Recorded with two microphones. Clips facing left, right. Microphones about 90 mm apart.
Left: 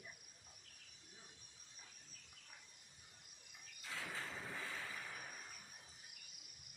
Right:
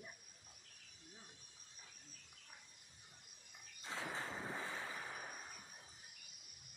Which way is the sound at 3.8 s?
30° right (ahead or behind).